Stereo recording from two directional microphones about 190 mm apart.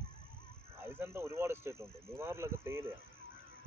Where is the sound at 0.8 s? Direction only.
15° right (ahead or behind).